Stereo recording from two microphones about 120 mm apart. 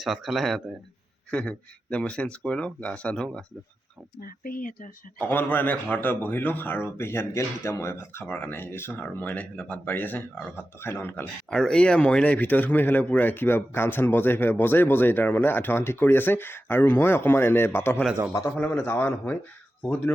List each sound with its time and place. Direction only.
0.0 s speech: centre (ahead or behind)
1.3 s a man's voice: 10° left (ahead or behind)
5.3 s a man's voice: 15° left (ahead or behind)
11.5 s a man's voice: 5° left (ahead or behind)